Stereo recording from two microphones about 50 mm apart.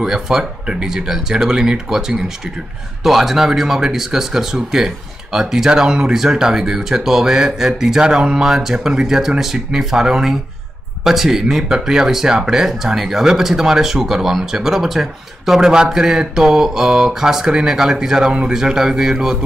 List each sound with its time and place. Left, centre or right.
0.0 s speech: centre